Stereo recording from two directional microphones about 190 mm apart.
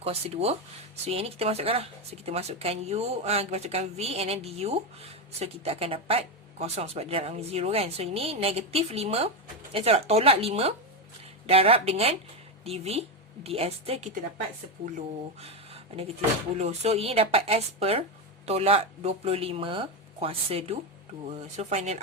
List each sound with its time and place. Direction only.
0.0 s speech: 30° right (ahead or behind)